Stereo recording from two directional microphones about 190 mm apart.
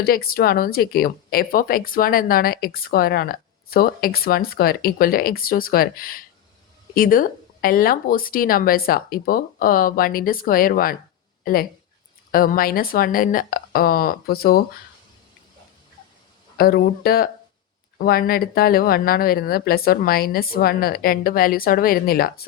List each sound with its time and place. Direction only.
0.0 s speech: 50° left (ahead or behind)
16.6 s speech: 55° left (ahead or behind)